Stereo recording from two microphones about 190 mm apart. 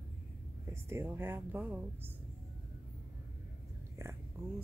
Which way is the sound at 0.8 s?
10° right (ahead or behind).